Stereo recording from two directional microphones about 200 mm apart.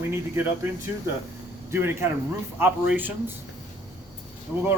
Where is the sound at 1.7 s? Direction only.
10° right (ahead or behind).